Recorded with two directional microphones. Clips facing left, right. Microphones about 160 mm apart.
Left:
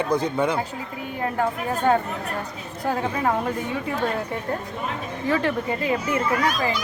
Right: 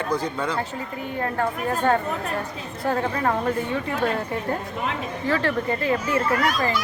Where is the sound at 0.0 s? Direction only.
20° left (ahead or behind).